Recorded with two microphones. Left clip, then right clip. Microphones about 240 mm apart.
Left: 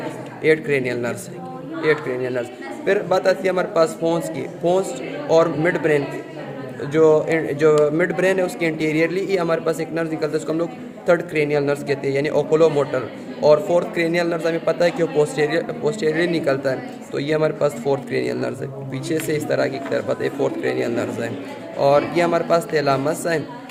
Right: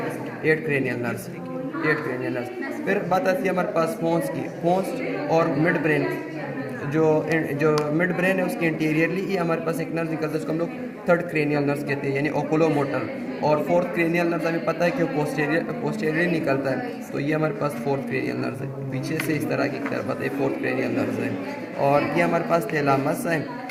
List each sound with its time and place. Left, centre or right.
0.4 s a man's voice: left
5.3 s a man's voice: left
21.8 s a man's voice: left